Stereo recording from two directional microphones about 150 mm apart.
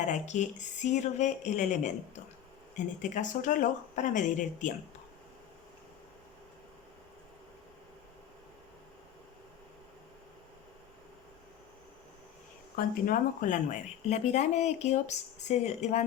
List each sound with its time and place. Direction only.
0.0 s speech: 50° left (ahead or behind)
12.7 s speech: 60° left (ahead or behind)